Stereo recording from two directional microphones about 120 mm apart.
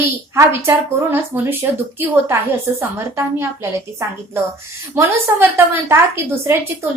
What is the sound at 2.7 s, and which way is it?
Speech, 20° right (ahead or behind).